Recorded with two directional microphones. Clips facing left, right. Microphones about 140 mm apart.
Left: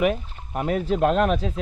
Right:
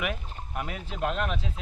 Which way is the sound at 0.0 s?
35° left (ahead or behind).